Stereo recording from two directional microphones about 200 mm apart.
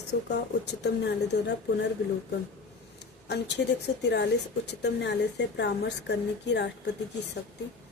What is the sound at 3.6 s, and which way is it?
A woman's voice, 55° left (ahead or behind).